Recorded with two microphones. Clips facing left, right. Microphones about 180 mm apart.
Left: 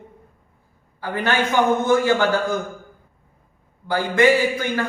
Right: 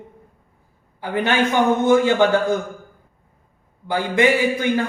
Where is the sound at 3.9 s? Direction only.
20° right (ahead or behind).